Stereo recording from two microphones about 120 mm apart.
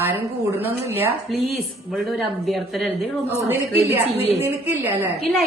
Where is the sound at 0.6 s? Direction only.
15° right (ahead or behind).